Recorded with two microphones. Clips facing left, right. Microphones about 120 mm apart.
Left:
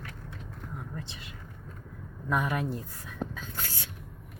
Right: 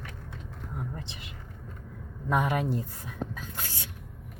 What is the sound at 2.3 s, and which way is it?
Speech, 25° right (ahead or behind).